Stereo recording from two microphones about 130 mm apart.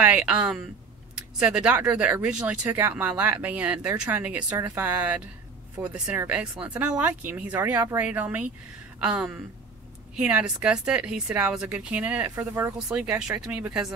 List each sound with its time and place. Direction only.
0.0 s speech: 10° right (ahead or behind)
12.4 s speech: 20° right (ahead or behind)
12.7 s speech: 5° right (ahead or behind)